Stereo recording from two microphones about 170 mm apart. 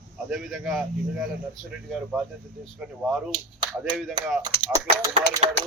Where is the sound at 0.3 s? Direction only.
5° right (ahead or behind).